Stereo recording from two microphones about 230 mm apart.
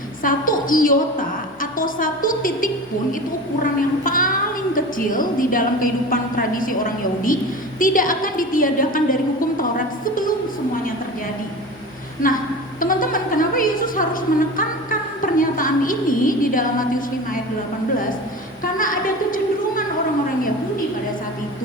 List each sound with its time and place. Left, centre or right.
0.2 s a sound: left
1.8 s a woman's voice: left
9.6 s music: left
12.2 s a woman's voice: left
12.8 s music: left
15.4 s a woman's voice: left
18.6 s a woman's voice: left